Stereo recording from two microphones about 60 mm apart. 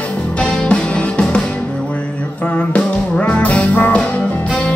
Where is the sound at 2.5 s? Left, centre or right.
Left.